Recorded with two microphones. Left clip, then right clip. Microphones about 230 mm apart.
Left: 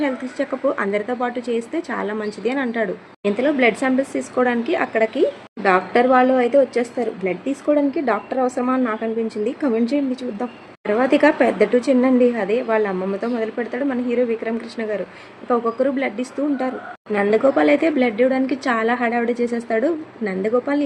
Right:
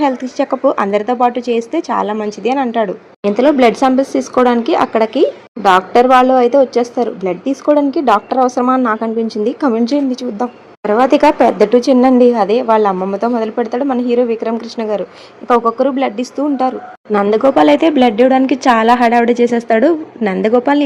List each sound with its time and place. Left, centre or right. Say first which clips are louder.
0.0 s a woman's voice: right 8 dB; right